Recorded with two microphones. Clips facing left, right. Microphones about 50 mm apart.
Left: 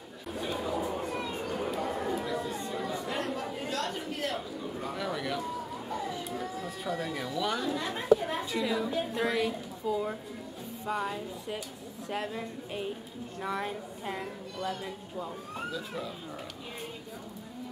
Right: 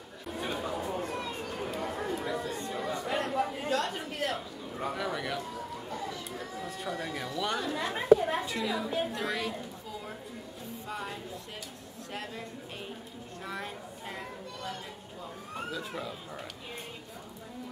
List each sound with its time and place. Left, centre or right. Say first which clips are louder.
0.6 s chatter: left 3 dB; centre
7.9 s a sound: right 3 dB; centre
9.1 s a woman's voice: left 4 dB; centre